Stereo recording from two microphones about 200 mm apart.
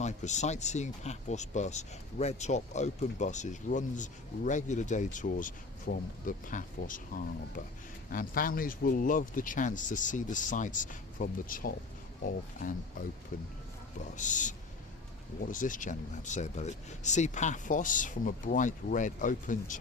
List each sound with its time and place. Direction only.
0.0 s speech: 35° left (ahead or behind)